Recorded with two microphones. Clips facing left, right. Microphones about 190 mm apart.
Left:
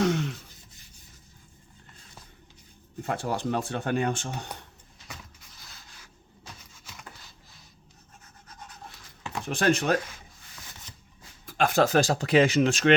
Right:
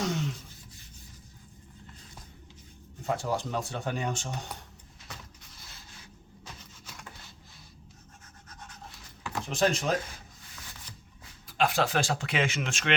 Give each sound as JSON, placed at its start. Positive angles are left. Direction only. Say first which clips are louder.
{"t": 0.0, "sound": "a sound", "louder": "left 6 dB", "side_deg": 60}
{"t": 3.2, "sound": "speech", "louder": "left 3 dB", "side_deg": 60}
{"t": 9.6, "sound": "speech", "louder": "left 3 dB", "side_deg": 65}
{"t": 11.4, "sound": "speech", "louder": "left 4 dB", "side_deg": 50}